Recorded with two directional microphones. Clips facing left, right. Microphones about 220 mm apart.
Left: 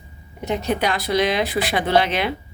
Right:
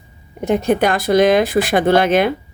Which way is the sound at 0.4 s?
50° right (ahead or behind).